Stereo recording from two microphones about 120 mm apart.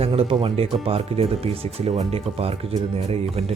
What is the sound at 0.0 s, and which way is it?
Speech, 55° right (ahead or behind).